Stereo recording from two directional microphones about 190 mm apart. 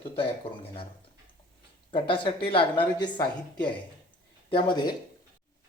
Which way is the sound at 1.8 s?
25° left (ahead or behind).